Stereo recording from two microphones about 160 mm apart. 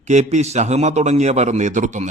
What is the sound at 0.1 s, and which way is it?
Speech, 45° right (ahead or behind).